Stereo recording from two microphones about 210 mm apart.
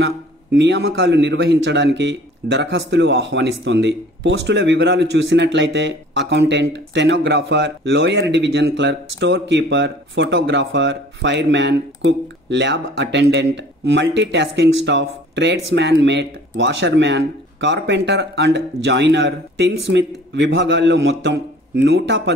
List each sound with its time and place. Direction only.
0.0 s a man's voice: 55° right (ahead or behind)